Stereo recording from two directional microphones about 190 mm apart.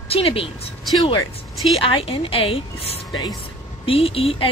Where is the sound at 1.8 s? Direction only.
30° left (ahead or behind).